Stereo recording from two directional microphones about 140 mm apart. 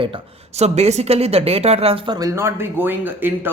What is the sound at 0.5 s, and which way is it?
A woman's voice, 50° right (ahead or behind).